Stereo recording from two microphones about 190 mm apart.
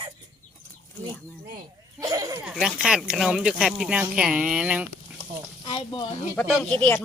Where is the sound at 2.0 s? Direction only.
20° right (ahead or behind).